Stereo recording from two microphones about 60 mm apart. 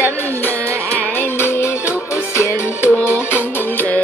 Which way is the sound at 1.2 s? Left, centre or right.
Left.